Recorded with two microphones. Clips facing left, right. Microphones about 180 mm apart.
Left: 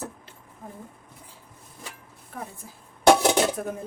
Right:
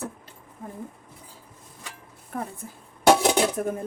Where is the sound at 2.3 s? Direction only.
55° right (ahead or behind).